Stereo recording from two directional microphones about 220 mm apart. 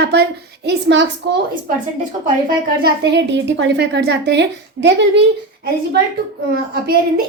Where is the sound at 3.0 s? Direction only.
50° right (ahead or behind).